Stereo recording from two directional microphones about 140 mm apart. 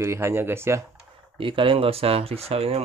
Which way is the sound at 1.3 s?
40° right (ahead or behind).